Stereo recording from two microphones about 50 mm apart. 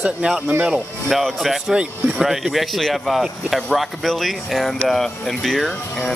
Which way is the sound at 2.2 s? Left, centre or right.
Centre.